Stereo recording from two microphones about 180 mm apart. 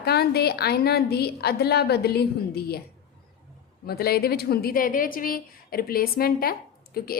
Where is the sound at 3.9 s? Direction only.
60° left (ahead or behind).